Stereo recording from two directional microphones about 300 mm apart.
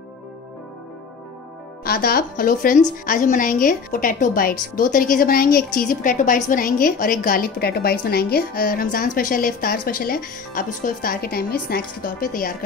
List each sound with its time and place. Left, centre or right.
1.9 s a woman's voice: left